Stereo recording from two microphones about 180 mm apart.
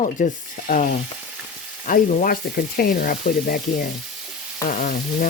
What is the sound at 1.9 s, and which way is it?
Speech, 50° left (ahead or behind).